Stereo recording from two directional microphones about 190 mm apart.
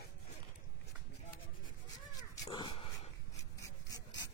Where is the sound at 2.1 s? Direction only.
25° left (ahead or behind).